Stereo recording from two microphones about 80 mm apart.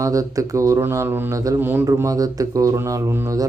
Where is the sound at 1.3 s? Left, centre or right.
Right.